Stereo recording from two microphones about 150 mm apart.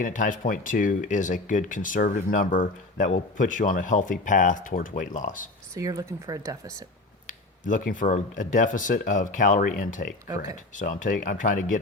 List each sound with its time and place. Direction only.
0.0 s speech: 60° left (ahead or behind)
5.7 s speech: 20° right (ahead or behind)
7.3 s speech: 60° left (ahead or behind)